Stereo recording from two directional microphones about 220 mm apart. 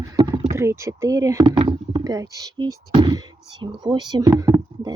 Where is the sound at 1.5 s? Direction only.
20° right (ahead or behind).